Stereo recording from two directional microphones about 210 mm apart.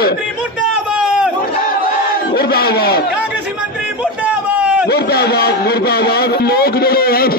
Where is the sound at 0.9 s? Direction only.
5° right (ahead or behind).